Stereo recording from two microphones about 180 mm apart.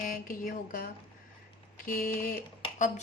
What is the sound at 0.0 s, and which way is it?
Speech, 50° left (ahead or behind).